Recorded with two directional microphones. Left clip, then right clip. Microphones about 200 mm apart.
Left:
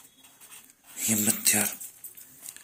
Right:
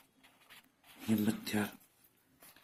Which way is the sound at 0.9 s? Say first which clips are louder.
Left 7 dB; 5° left (ahead or behind).